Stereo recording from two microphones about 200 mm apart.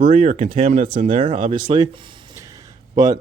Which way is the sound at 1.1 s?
25° right (ahead or behind).